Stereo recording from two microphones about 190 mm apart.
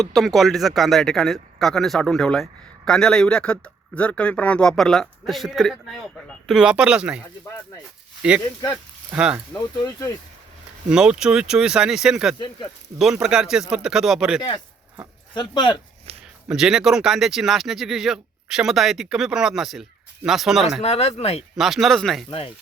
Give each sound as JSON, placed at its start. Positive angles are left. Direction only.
{"t": 0.0, "sound": "speech", "side_deg": 0}
{"t": 8.2, "sound": "speech", "side_deg": -5}
{"t": 9.5, "sound": "speech", "side_deg": 15}
{"t": 10.8, "sound": "speech", "side_deg": -5}
{"t": 15.4, "sound": "speech", "side_deg": 25}
{"t": 16.1, "sound": "a sound", "side_deg": -35}
{"t": 16.5, "sound": "speech", "side_deg": -5}
{"t": 20.8, "sound": "speech", "side_deg": 35}
{"t": 21.6, "sound": "speech", "side_deg": 0}
{"t": 22.3, "sound": "speech", "side_deg": 30}